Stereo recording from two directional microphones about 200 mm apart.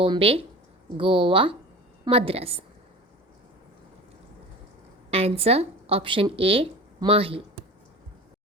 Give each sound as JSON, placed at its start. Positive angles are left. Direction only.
{"t": 0.0, "sound": "speech", "side_deg": -25}
{"t": 5.1, "sound": "speech", "side_deg": -30}